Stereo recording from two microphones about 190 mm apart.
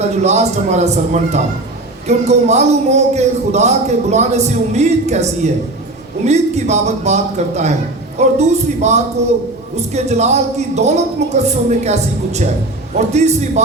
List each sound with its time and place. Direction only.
0.0 s a man's voice: 35° right (ahead or behind)